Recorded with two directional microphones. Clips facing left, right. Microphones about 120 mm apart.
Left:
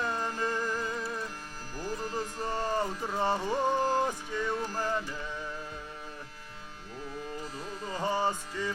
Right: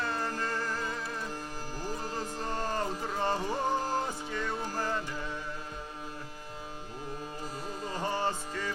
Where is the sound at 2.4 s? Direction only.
10° left (ahead or behind).